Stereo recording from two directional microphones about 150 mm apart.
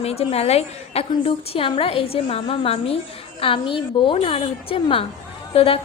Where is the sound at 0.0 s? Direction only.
40° left (ahead or behind).